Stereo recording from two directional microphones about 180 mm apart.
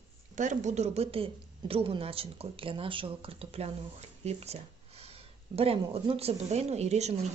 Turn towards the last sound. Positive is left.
turn(degrees=-35)  # may be behind; listen again after turning